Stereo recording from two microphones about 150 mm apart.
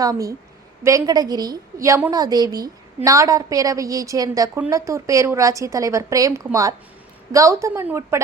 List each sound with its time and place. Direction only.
0.0 s a woman's voice: 25° right (ahead or behind)